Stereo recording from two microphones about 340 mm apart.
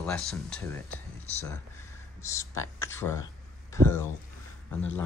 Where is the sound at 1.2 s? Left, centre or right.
Centre.